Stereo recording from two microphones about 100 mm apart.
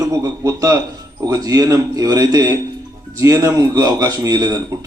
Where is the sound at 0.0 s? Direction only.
30° right (ahead or behind).